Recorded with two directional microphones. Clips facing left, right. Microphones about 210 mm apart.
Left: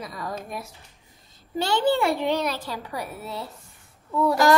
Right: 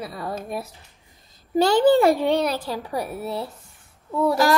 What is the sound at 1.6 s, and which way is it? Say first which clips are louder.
A woman's voice: right 6 dB; 40° right (ahead or behind).